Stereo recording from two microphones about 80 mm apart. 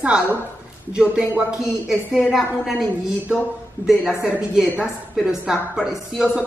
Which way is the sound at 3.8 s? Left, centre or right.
Centre.